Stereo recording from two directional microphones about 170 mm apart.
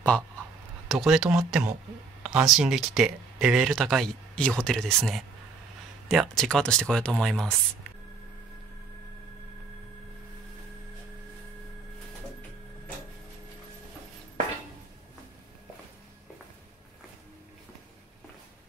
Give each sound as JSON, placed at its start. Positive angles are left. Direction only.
{"t": 0.8, "sound": "speech", "side_deg": -5}